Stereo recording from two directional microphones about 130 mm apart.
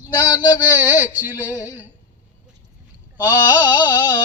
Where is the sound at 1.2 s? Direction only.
15° right (ahead or behind).